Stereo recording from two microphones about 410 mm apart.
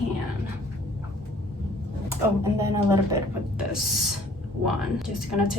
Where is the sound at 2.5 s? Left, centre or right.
Centre.